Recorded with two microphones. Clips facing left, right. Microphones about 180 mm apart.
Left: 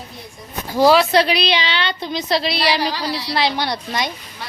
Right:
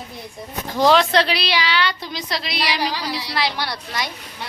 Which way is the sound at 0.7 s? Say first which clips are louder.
Left 3 dB; 10° left (ahead or behind).